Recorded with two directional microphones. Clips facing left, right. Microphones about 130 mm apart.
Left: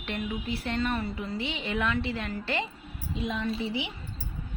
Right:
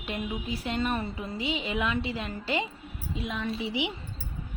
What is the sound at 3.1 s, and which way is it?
Speech, centre (ahead or behind).